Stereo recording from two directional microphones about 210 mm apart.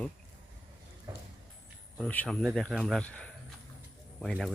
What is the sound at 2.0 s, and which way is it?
Speech, 5° left (ahead or behind).